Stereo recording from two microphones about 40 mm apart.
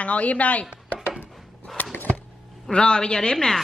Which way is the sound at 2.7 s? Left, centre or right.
Left.